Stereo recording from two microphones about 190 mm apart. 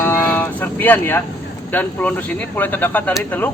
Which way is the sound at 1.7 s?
10° left (ahead or behind).